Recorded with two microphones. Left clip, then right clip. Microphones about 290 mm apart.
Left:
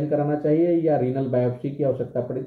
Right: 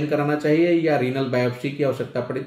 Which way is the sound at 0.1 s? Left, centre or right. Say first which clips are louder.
Right 1 dB; right.